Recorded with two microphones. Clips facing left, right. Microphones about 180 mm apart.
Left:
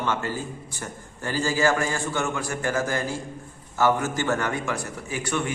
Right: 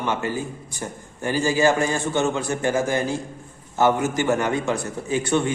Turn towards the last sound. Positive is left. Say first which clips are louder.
# right 6 dB
turn(degrees=-25)  # may be behind; listen again after turning